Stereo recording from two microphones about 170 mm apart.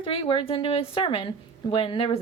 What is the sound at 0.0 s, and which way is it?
Speech, 30° left (ahead or behind).